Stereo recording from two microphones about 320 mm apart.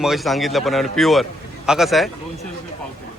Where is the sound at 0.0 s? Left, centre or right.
Centre.